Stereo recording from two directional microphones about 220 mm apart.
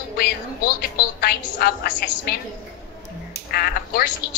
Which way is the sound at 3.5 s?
45° left (ahead or behind).